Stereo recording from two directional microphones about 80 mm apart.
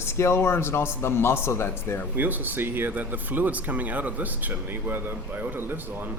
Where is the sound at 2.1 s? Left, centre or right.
Right.